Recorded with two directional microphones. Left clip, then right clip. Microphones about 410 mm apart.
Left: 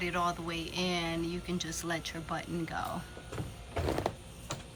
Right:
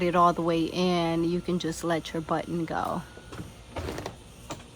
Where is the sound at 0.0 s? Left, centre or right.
Centre.